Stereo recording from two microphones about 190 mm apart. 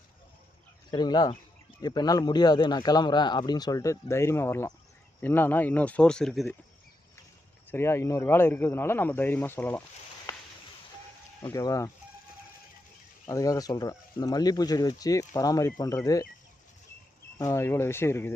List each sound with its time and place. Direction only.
0.9 s speech: 20° left (ahead or behind); by 6.5 s centre (ahead or behind)
7.7 s speech: 15° left (ahead or behind)
10.3 s a sound: 15° left (ahead or behind)
11.4 s speech: 15° left (ahead or behind)
13.2 s speech: 15° left (ahead or behind)
17.3 s speech: 15° left (ahead or behind)